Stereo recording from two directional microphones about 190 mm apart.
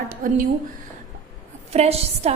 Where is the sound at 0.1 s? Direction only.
45° right (ahead or behind).